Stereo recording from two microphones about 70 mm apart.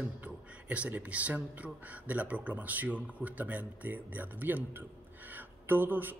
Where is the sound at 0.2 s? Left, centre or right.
Right.